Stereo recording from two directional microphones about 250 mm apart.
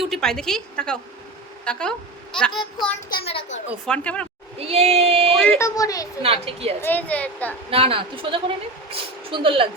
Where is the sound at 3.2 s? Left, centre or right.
Left.